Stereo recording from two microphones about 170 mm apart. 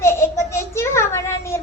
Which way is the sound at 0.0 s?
15° left (ahead or behind).